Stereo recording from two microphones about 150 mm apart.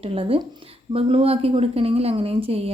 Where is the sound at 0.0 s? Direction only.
40° right (ahead or behind).